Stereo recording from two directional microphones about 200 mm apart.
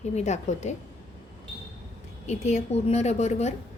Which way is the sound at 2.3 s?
35° left (ahead or behind).